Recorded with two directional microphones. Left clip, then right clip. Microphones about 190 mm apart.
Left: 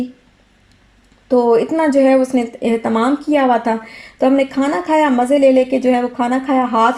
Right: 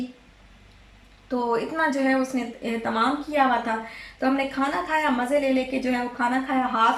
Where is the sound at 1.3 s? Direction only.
40° left (ahead or behind).